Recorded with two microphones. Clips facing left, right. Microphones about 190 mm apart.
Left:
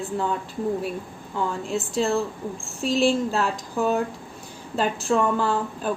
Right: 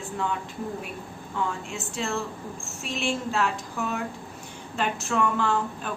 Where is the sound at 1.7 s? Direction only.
35° left (ahead or behind).